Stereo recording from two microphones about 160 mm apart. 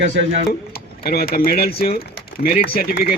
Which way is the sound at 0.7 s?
70° left (ahead or behind).